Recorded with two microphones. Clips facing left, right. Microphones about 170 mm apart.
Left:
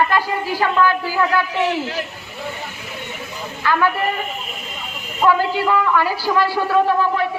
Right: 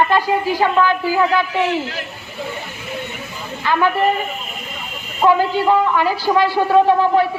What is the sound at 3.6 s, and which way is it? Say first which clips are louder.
Speech: right 1 dB; 20° right (ahead or behind).